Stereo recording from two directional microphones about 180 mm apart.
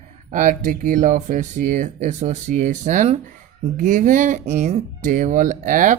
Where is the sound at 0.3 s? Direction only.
45° right (ahead or behind).